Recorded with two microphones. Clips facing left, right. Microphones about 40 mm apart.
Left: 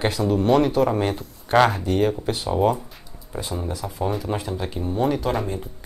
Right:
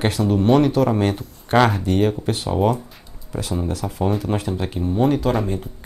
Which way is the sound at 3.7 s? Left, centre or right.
Right.